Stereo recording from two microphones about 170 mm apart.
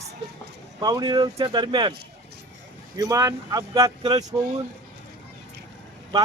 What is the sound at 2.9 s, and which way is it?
Speech, 20° right (ahead or behind).